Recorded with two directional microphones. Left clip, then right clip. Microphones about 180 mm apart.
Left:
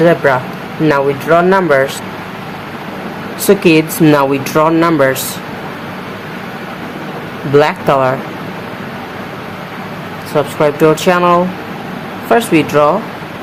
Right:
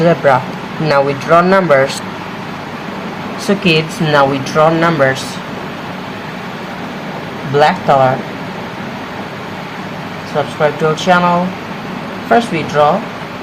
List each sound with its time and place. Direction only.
0.0 s speech: 15° left (ahead or behind)
3.4 s speech: 30° left (ahead or behind)
7.6 s speech: 35° left (ahead or behind)
10.6 s speech: 35° left (ahead or behind)
12.3 s speech: 30° left (ahead or behind)